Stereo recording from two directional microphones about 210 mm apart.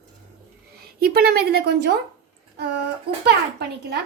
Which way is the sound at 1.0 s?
45° right (ahead or behind).